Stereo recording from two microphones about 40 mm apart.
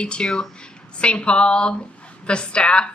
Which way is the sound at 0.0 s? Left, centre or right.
Left.